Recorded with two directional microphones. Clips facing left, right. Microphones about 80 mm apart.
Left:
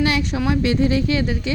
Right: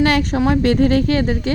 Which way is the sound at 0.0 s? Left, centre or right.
Right.